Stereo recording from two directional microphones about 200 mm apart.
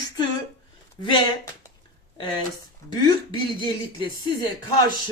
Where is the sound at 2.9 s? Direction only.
20° left (ahead or behind).